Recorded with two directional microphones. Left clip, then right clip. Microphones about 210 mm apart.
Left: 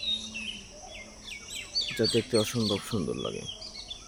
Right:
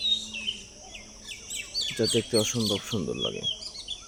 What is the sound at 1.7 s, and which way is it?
Speech, centre (ahead or behind).